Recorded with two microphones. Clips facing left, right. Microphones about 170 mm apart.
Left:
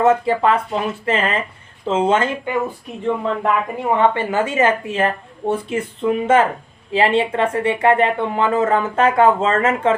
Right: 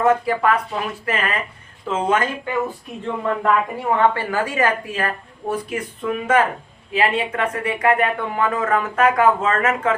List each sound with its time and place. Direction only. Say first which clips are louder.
0.0 s a woman's voice: left 2 dB; 25° left (ahead or behind)